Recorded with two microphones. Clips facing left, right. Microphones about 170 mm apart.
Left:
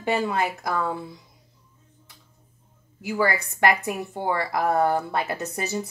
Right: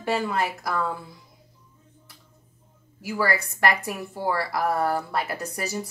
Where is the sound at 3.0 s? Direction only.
20° left (ahead or behind).